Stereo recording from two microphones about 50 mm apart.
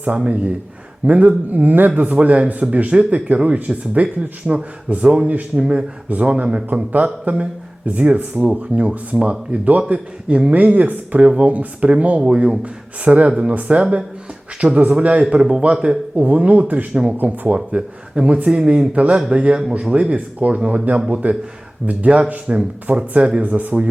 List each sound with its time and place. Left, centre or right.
1.0 s speech: right
8.9 s speech: centre
16.1 s speech: right
16.9 s speech: centre
17.2 s speech: right
17.7 s speech: centre
23.4 s speech: right